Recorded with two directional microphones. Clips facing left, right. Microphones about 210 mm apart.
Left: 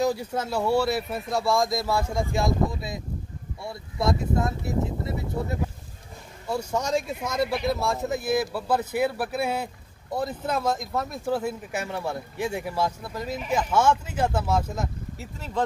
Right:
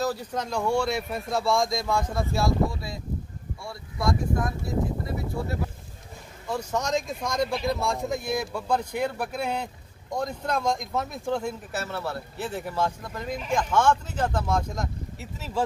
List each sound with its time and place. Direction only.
0.0 s speech: 10° left (ahead or behind)
6.4 s speech: 10° left (ahead or behind)